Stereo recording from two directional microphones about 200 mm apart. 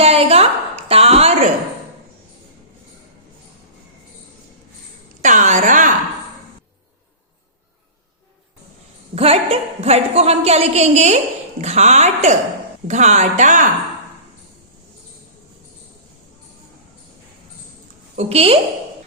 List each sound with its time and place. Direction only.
0.0 s a woman's voice: 30° right (ahead or behind)
5.2 s a woman's voice: 35° right (ahead or behind)
9.1 s a woman's voice: 30° right (ahead or behind)
18.2 s a woman's voice: 30° right (ahead or behind)